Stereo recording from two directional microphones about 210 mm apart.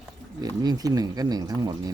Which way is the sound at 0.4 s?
20° right (ahead or behind).